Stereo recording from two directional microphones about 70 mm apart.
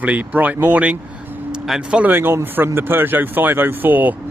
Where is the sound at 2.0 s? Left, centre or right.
Right.